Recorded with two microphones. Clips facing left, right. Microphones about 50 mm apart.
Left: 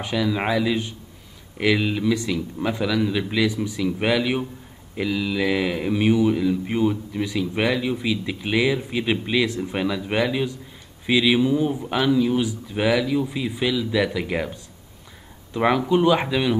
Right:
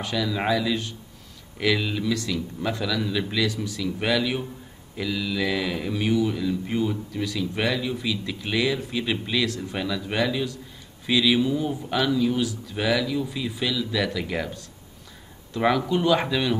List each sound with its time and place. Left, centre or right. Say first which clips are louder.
0.0 s speech: left 3 dB; centre